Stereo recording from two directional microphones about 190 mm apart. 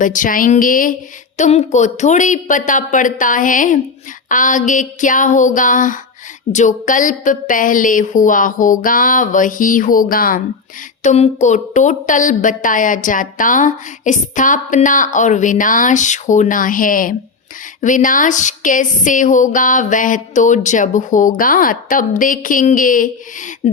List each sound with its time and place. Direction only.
0.0 s a woman's voice: 45° left (ahead or behind)
11.0 s a woman's voice: 35° left (ahead or behind)